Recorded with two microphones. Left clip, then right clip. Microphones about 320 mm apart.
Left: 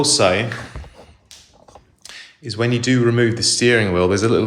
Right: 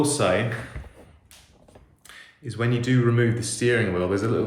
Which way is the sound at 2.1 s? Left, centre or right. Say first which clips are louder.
Left 9 dB; centre.